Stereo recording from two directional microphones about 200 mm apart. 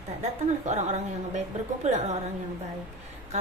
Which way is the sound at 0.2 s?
35° right (ahead or behind).